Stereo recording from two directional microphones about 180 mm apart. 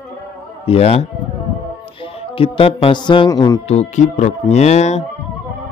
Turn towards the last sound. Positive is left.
turn(degrees=40)  # may be behind; listen again after turning